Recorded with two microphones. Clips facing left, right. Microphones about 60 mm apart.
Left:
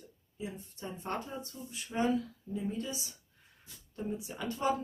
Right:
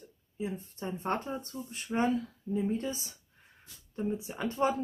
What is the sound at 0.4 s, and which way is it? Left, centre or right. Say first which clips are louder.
Speech: right 5 dB; right.